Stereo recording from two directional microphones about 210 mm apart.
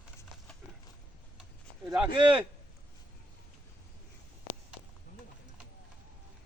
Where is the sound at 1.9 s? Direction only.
10° right (ahead or behind).